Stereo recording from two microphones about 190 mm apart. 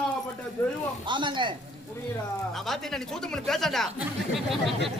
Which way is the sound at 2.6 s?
Centre (ahead or behind).